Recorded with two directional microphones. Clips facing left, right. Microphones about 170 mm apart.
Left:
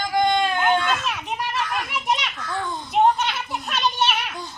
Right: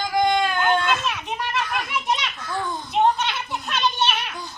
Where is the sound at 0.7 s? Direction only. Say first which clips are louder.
Even; centre (ahead or behind).